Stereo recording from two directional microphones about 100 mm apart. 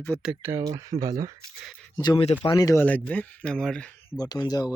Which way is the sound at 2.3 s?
70° left (ahead or behind).